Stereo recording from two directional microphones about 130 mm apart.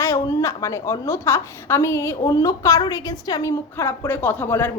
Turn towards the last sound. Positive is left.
turn(degrees=15)  # may be behind; listen again after turning